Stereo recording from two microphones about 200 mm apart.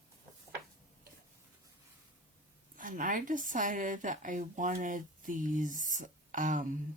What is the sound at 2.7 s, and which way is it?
Speech, 40° right (ahead or behind).